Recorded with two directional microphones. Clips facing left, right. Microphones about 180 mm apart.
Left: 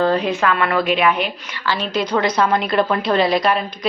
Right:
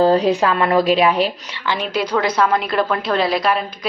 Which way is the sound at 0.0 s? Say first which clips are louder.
Right 3 dB; 35° right (ahead or behind).